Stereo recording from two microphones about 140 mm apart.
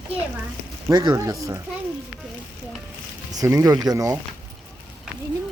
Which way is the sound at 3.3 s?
25° right (ahead or behind).